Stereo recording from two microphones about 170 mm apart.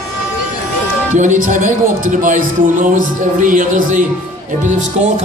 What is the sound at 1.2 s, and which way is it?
A man's voice, 45° right (ahead or behind).